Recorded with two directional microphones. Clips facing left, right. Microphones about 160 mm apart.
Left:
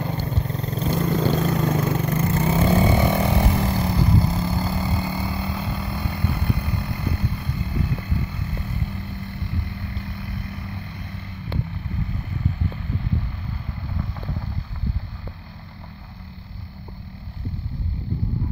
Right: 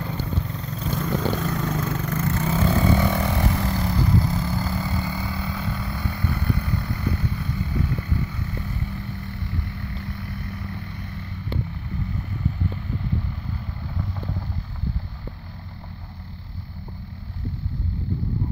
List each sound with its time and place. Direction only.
0.0 s vehicle: 35° left (ahead or behind)
3.4 s vehicle: 10° left (ahead or behind)
4.3 s vehicle: 25° left (ahead or behind); by 7.7 s 5° left (ahead or behind)